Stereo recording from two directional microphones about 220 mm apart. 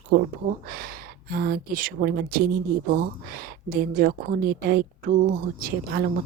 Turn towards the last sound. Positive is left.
turn(degrees=-40)  # may be behind; listen again after turning